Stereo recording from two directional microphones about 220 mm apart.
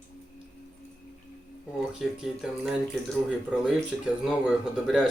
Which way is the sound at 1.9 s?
Centre (ahead or behind).